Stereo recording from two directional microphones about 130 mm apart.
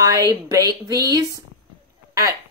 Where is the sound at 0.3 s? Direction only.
25° right (ahead or behind).